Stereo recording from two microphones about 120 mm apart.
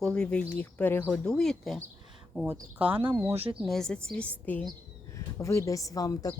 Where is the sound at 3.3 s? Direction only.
55° right (ahead or behind).